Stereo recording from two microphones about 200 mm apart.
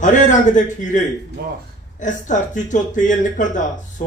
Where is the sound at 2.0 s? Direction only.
40° left (ahead or behind).